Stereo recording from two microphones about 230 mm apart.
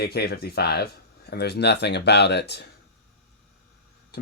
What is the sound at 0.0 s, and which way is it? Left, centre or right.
Speech, left.